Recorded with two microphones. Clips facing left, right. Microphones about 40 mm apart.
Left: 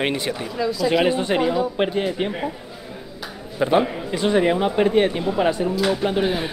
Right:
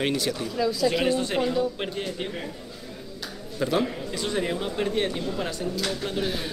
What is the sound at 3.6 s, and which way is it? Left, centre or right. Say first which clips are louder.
Speech: left 6 dB; left.